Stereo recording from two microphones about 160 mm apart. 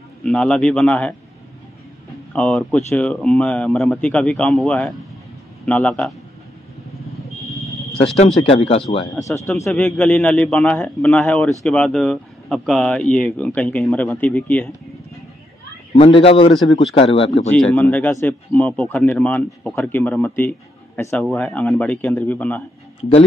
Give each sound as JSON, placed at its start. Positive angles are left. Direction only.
{"t": 0.2, "sound": "speech", "side_deg": 5}
{"t": 2.3, "sound": "speech", "side_deg": 5}
{"t": 8.4, "sound": "a man's voice", "side_deg": 35}
{"t": 9.3, "sound": "speech", "side_deg": 20}
{"t": 9.7, "sound": "speech", "side_deg": 5}
{"t": 15.9, "sound": "a man's voice", "side_deg": 35}
{"t": 17.5, "sound": "speech", "side_deg": 10}